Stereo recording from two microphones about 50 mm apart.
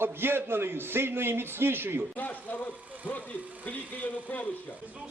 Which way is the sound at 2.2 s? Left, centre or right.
Left.